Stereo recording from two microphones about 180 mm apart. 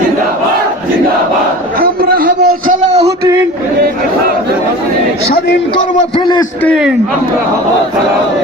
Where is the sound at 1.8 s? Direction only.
55° right (ahead or behind).